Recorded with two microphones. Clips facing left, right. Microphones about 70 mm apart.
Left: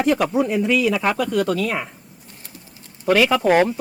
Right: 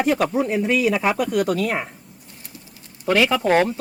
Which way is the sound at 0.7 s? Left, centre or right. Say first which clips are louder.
Right 1 dB; centre.